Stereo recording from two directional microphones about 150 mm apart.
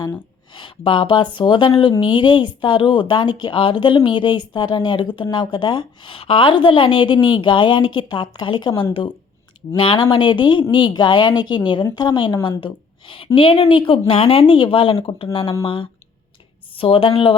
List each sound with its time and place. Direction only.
0.0 s speech: 30° left (ahead or behind)